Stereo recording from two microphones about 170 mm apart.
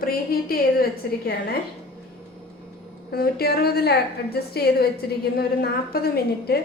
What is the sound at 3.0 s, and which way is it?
A woman's voice, 65° left (ahead or behind).